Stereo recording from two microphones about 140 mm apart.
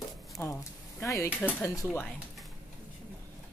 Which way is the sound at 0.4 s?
15° left (ahead or behind).